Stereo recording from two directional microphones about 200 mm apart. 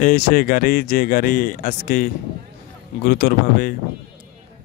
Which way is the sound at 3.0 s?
50° left (ahead or behind).